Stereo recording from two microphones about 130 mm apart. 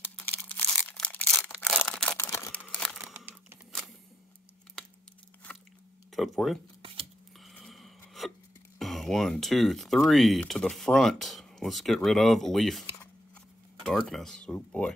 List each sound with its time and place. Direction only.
0.0 s a sound: 15° left (ahead or behind)
0.7 s crushing: 5° left (ahead or behind)
1.4 s a sound: 5° right (ahead or behind)
1.7 s camera: 10° left (ahead or behind)
2.5 s crumpling: 10° left (ahead or behind)
3.0 s crumpling: 10° right (ahead or behind)
5.5 s biting: 5° left (ahead or behind)
6.1 s speech: centre (ahead or behind)
7.3 s a sound: centre (ahead or behind)
8.7 s speech: centre (ahead or behind)
13.8 s speech: 5° left (ahead or behind)